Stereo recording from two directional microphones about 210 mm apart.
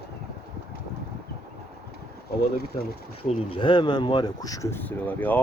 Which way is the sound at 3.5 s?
25° left (ahead or behind).